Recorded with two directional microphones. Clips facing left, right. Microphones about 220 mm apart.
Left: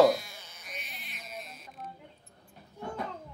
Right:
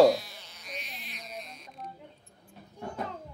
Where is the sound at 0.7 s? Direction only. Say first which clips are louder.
Right 3 dB; centre (ahead or behind).